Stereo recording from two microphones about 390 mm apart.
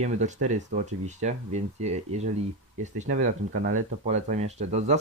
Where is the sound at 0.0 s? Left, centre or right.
Centre.